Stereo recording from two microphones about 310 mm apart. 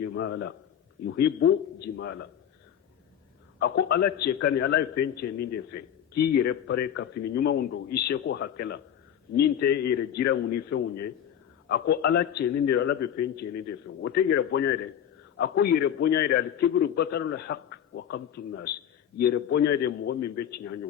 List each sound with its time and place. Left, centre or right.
0.0 s a man's voice: left
3.6 s a man's voice: left